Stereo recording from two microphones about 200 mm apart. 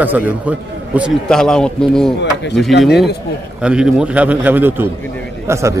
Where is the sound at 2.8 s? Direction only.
Centre (ahead or behind).